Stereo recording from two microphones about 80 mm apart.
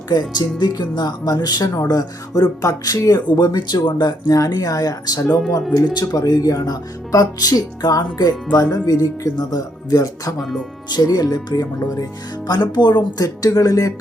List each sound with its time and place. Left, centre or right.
0.1 s speech: left
4.4 s speech: left
10.3 s speech: centre
10.9 s speech: left
12.5 s speech: left